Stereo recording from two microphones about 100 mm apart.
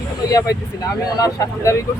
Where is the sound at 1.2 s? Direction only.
30° left (ahead or behind).